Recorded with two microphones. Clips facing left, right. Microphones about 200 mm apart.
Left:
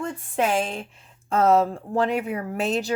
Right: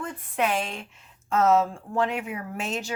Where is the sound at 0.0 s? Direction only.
30° left (ahead or behind).